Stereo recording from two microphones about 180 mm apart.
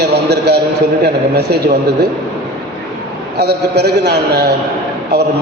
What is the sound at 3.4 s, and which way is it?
A man's voice, 65° right (ahead or behind).